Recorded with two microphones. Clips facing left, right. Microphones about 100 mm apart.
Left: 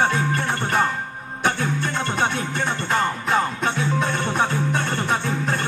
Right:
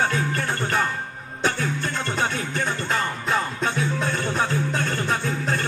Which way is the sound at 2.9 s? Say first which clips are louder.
Left 5 dB; 30° left (ahead or behind).